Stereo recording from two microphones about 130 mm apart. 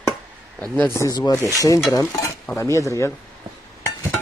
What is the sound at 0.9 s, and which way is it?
Speech, 30° left (ahead or behind).